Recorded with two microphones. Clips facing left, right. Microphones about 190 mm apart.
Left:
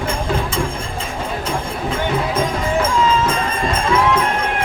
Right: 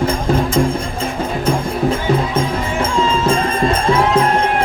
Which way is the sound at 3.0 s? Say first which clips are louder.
Right 2 dB; 30° right (ahead or behind).